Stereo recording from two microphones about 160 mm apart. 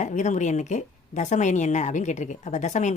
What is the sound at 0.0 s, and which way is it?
A woman's voice, 50° left (ahead or behind).